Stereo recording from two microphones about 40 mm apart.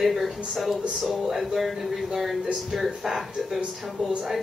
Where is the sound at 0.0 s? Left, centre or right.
Centre.